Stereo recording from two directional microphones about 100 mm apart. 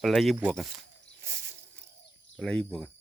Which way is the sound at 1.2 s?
30° right (ahead or behind).